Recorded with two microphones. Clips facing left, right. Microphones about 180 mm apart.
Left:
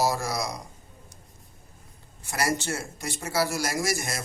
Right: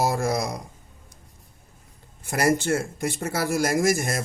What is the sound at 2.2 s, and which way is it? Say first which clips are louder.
Speech: right 6 dB; 50° right (ahead or behind).